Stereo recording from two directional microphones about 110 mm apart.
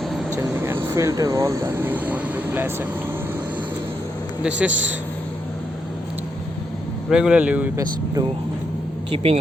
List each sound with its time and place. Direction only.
0.3 s speech: 20° right (ahead or behind)
4.4 s speech: 10° right (ahead or behind)
7.1 s speech: 5° right (ahead or behind)
9.1 s speech: 65° right (ahead or behind)